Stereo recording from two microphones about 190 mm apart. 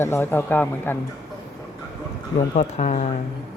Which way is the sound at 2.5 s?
40° left (ahead or behind).